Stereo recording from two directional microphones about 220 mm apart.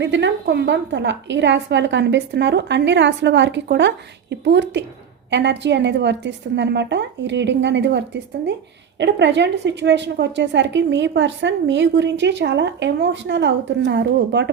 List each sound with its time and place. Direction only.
0.0 s a woman's voice: 55° right (ahead or behind)